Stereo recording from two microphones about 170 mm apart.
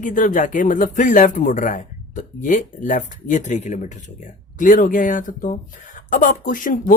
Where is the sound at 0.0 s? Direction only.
50° left (ahead or behind).